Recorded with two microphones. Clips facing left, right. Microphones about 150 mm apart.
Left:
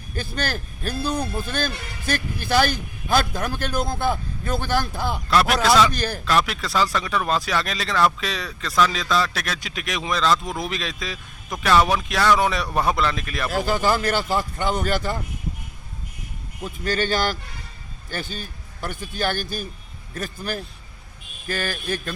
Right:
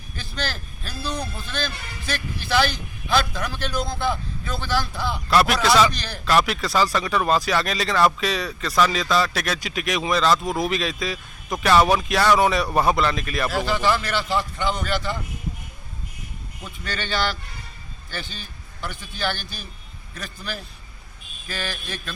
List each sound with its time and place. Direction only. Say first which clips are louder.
0.2 s a man's voice: left 3 dB; 50° left (ahead or behind)
5.3 s speech: even; 5° right (ahead or behind)
5.9 s a man's voice: left 7 dB; 50° left (ahead or behind)
6.2 s speech: right 3 dB; centre (ahead or behind)
13.5 s a man's voice: left 2 dB; 45° left (ahead or behind)
16.8 s a man's voice: left 4 dB; 45° left (ahead or behind)